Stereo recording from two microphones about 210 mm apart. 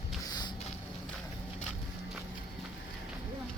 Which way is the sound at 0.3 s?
20° left (ahead or behind).